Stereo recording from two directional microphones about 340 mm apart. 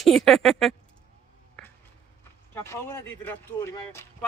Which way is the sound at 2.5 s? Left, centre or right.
Centre.